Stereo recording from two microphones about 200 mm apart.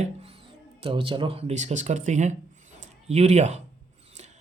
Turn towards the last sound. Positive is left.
turn(degrees=-35)  # may be behind; listen again after turning